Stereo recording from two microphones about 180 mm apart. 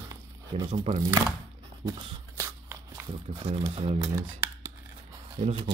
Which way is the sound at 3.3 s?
35° right (ahead or behind).